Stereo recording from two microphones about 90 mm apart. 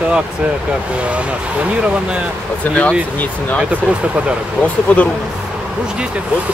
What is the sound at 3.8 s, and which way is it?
Speech, 10° right (ahead or behind).